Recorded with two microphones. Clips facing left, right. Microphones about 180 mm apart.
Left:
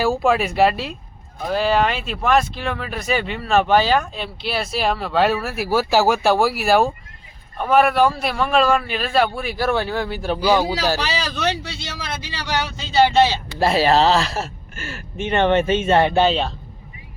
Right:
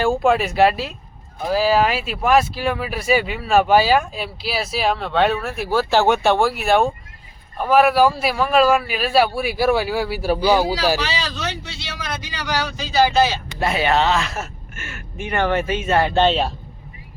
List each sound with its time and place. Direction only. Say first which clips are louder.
0.0 s a man's voice: right 1 dB; centre (ahead or behind)
11.3 s speech: left 5 dB; 70° left (ahead or behind)
11.9 s speech: right 3 dB; 25° left (ahead or behind)
16.1 s speech: even; 5° left (ahead or behind)